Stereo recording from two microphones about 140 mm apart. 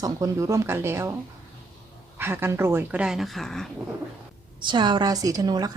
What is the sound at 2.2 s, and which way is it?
A woman's voice, 15° right (ahead or behind).